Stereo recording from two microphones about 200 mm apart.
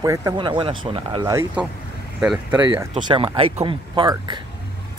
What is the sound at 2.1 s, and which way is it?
Speech, 5° right (ahead or behind).